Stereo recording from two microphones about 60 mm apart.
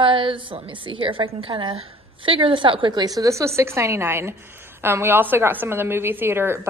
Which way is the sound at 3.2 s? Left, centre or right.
Right.